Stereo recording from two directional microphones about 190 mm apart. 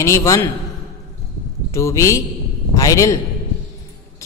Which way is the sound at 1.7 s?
15° left (ahead or behind).